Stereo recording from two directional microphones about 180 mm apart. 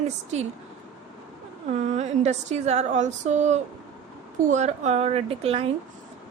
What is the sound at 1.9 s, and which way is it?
Speech, 40° right (ahead or behind).